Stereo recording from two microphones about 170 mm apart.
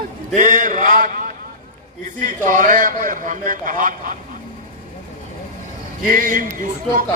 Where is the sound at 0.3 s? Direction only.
50° right (ahead or behind).